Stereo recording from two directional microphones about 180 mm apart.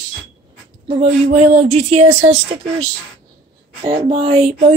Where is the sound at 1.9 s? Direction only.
40° right (ahead or behind).